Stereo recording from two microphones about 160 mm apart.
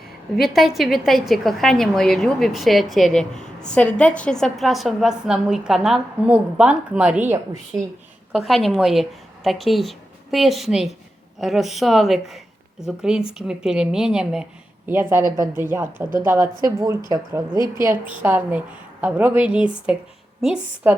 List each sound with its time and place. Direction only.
0.4 s a woman's voice: centre (ahead or behind)